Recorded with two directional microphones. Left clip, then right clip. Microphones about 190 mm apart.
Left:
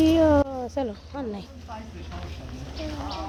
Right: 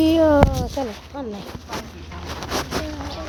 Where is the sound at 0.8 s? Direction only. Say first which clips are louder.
Right 2 dB; centre (ahead or behind).